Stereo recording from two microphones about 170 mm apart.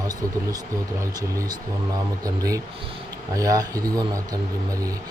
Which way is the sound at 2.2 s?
20° right (ahead or behind).